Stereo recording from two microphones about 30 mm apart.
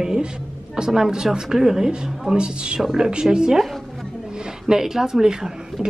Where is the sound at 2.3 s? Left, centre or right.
Right.